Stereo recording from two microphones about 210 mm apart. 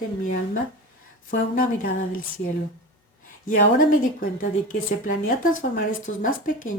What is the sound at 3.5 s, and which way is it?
Speech, 40° left (ahead or behind).